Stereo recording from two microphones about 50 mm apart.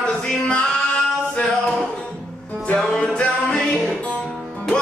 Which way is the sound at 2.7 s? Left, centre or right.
Centre.